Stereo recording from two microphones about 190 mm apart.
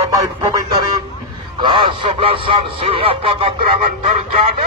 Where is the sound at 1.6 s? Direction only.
25° right (ahead or behind).